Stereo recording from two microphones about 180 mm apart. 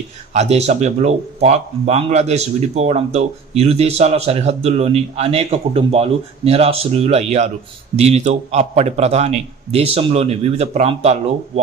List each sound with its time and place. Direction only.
0.3 s speech: 35° right (ahead or behind)